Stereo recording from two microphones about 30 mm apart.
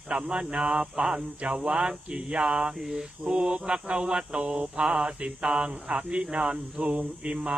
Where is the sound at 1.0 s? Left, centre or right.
Right.